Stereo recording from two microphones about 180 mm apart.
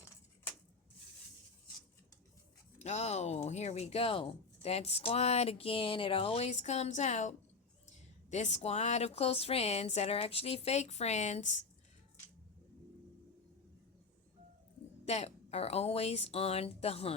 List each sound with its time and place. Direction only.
2.7 s speech: 40° left (ahead or behind)
15.0 s speech: 35° left (ahead or behind)